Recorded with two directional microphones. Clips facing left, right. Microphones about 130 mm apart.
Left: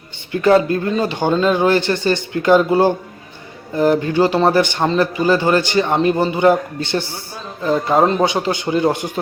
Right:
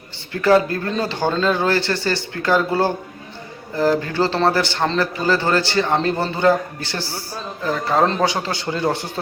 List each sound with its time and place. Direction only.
0.3 s a man's voice: 20° left (ahead or behind)